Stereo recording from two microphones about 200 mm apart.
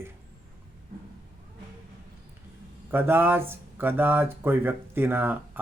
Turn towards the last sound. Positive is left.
turn(degrees=-10)  # may be behind; listen again after turning